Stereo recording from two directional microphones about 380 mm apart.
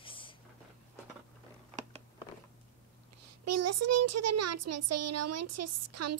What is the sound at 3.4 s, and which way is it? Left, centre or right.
A child's voice, right.